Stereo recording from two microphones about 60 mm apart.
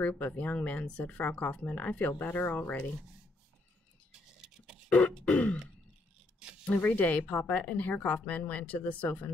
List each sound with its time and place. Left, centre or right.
0.0 s speech: left
4.1 s vehicle: centre
4.8 s speech: left
6.6 s speech: left